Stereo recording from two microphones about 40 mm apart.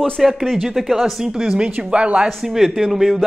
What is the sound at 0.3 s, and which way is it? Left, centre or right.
Speech, centre.